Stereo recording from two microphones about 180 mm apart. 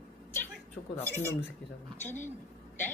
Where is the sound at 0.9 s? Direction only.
15° left (ahead or behind).